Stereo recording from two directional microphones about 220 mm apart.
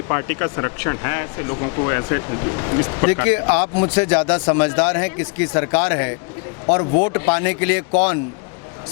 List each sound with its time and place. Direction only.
0.1 s speech: 15° left (ahead or behind)